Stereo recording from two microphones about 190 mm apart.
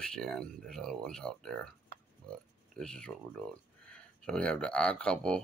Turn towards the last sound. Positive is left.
turn(degrees=5)  # may be behind; listen again after turning